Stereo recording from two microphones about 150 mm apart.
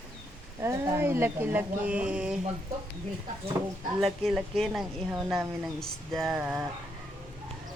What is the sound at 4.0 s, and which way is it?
Speech, centre (ahead or behind).